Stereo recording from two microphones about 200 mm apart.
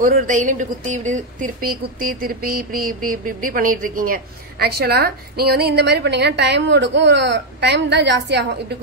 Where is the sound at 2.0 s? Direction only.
45° right (ahead or behind).